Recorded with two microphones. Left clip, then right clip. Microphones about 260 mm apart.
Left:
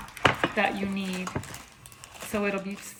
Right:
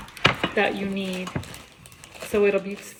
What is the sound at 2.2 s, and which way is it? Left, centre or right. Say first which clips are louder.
Speech: right 8 dB; centre.